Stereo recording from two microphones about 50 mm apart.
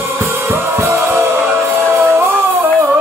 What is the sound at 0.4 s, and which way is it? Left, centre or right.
Music, right.